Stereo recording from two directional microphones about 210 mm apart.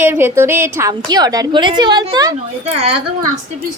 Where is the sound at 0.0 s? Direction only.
10° right (ahead or behind).